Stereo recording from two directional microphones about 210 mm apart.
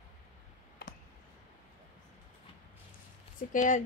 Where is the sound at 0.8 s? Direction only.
45° left (ahead or behind).